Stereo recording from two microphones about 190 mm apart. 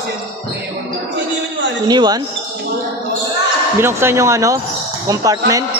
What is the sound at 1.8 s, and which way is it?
Speech, 20° right (ahead or behind).